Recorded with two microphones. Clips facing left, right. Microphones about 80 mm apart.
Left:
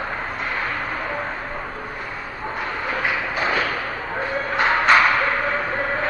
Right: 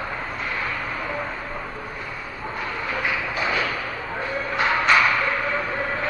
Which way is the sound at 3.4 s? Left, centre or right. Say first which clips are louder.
Left 2 dB; left.